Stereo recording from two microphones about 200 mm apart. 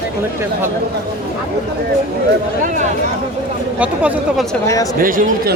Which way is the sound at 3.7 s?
5° right (ahead or behind).